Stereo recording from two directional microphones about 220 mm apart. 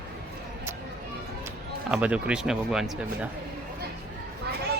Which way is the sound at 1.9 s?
5° right (ahead or behind).